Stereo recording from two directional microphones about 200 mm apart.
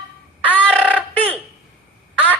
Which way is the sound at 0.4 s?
5° left (ahead or behind).